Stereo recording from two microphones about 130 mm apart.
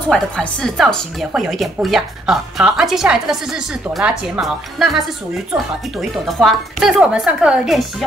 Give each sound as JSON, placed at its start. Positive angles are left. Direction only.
{"t": 0.1, "sound": "speech", "side_deg": 5}